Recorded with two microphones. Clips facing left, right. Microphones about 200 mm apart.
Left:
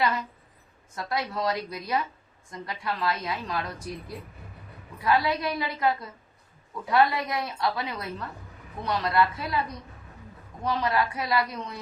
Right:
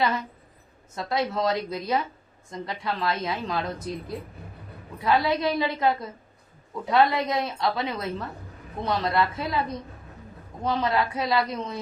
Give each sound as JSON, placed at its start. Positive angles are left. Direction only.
{"t": 0.9, "sound": "a woman's voice", "side_deg": -25}
{"t": 4.9, "sound": "a woman's voice", "side_deg": -25}